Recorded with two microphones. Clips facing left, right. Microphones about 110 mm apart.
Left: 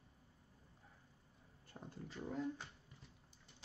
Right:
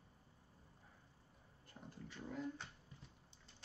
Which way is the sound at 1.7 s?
35° left (ahead or behind).